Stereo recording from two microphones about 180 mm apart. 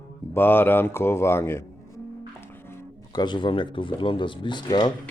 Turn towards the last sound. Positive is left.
turn(degrees=25)  # may be behind; listen again after turning